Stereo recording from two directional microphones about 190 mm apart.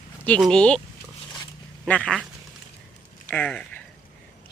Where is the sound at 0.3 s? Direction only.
5° left (ahead or behind).